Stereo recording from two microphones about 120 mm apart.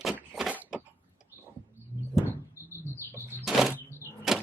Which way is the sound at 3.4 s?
Centre (ahead or behind).